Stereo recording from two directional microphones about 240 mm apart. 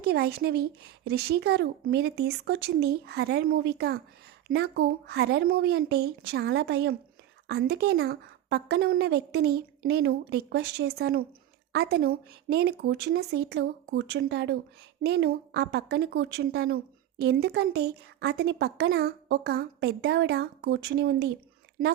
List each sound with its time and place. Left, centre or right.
0.0 s a woman's voice: right